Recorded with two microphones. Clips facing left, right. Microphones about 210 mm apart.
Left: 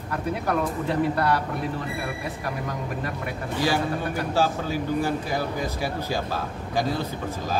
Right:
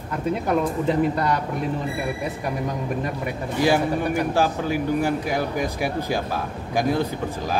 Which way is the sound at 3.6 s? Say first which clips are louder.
Right 5 dB; 15° right (ahead or behind).